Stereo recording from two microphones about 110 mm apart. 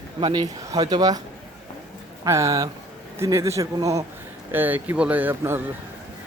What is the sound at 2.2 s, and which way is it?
Speech, 30° right (ahead or behind).